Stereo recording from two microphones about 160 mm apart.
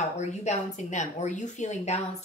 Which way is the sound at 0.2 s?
45° left (ahead or behind).